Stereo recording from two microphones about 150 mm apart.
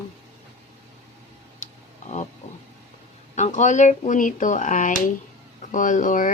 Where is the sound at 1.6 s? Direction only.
55° left (ahead or behind).